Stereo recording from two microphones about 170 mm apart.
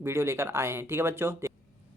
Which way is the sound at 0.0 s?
15° right (ahead or behind).